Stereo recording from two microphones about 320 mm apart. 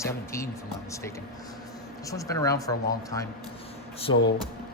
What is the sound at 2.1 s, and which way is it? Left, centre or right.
Speech, centre.